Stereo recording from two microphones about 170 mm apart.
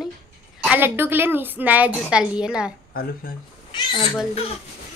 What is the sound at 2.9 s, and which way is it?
Speech, 65° left (ahead or behind).